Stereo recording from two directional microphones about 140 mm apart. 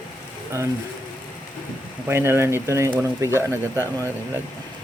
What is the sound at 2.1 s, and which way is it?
Speech, 15° right (ahead or behind).